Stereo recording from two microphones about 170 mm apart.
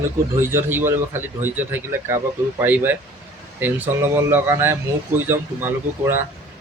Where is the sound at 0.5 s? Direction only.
15° right (ahead or behind).